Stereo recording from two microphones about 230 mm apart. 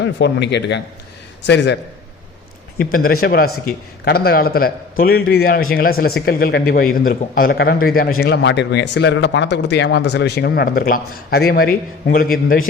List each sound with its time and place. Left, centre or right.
0.0 s a man's voice: left